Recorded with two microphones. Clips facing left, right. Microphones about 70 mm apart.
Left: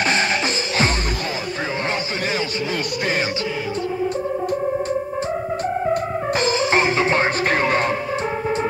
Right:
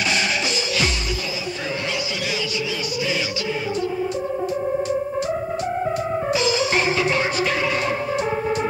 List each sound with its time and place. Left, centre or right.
0.0 s music: left
6.3 s music: left